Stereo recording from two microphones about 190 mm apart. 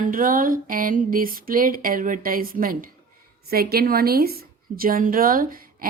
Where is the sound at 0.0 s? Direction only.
45° right (ahead or behind).